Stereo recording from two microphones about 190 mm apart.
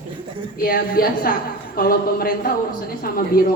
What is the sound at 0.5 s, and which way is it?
A woman's voice, 50° left (ahead or behind).